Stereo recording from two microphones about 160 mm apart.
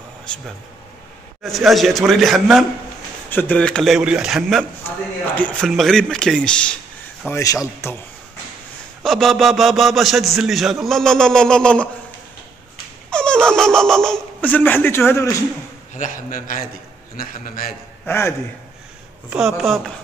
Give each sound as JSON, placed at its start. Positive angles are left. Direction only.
{"t": 0.3, "sound": "a man's voice", "side_deg": 5}
{"t": 3.3, "sound": "a man's voice", "side_deg": 10}
{"t": 4.8, "sound": "a man's voice", "side_deg": 10}
{"t": 7.2, "sound": "speech", "side_deg": 15}
{"t": 9.0, "sound": "a man's voice", "side_deg": 0}
{"t": 13.1, "sound": "speech", "side_deg": 5}
{"t": 15.9, "sound": "a man's voice", "side_deg": 55}
{"t": 18.0, "sound": "speech", "side_deg": 15}
{"t": 19.3, "sound": "a man's voice", "side_deg": 0}